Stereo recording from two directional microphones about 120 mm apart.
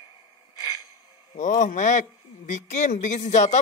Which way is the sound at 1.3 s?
90° left.